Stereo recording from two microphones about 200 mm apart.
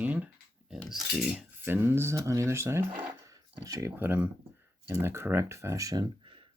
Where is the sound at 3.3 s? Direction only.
15° right (ahead or behind).